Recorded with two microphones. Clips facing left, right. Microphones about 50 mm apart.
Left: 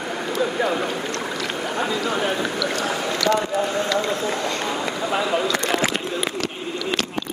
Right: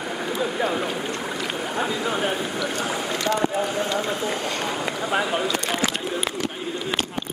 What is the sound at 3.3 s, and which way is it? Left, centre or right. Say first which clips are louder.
Speech: left 1 dB; right.